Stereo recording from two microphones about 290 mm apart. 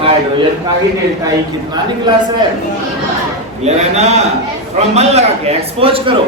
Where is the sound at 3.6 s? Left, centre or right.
Right.